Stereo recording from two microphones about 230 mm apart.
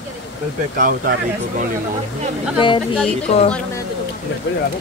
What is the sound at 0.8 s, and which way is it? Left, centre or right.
Speech, right.